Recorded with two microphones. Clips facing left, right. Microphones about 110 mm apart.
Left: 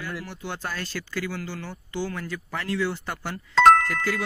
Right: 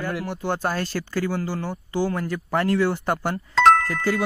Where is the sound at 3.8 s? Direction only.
30° right (ahead or behind).